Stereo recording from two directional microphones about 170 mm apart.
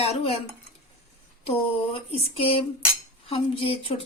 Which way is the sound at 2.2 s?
35° left (ahead or behind).